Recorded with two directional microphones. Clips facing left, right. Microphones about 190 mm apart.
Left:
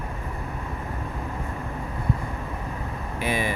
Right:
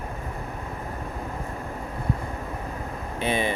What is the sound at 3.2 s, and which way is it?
Speech, 25° right (ahead or behind).